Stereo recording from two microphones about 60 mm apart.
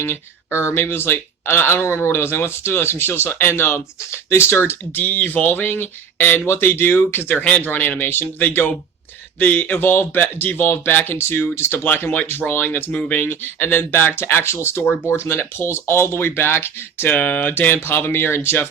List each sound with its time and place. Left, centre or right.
0.7 s speech: left
11.8 s speech: left
12.9 s a sound: left
13.1 s speech: left
17.1 s a sound: left
17.8 s speech: left